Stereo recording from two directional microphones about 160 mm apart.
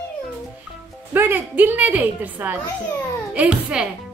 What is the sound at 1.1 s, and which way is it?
A woman's voice, 10° right (ahead or behind).